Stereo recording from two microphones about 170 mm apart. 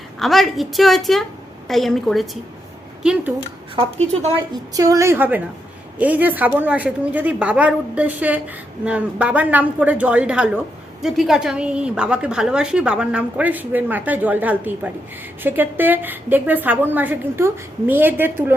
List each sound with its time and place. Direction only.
0.2 s a woman's voice: centre (ahead or behind)
4.1 s a woman's voice: 40° right (ahead or behind)
4.7 s a woman's voice: 20° right (ahead or behind)